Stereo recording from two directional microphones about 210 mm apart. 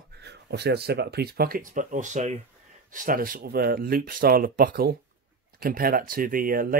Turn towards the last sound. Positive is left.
turn(degrees=-45)  # may be behind; listen again after turning